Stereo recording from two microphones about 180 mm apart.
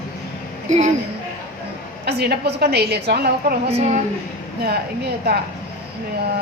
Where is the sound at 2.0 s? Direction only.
65° right (ahead or behind).